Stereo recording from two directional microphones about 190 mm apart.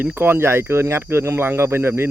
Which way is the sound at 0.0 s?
10° right (ahead or behind).